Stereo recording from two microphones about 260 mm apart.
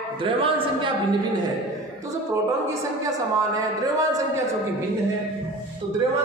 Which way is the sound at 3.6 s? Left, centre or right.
Centre.